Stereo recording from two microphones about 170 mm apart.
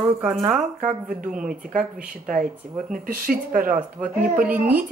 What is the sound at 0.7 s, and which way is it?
Speech, 45° right (ahead or behind).